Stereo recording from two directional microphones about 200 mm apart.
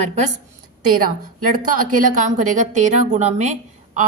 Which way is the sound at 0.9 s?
45° right (ahead or behind).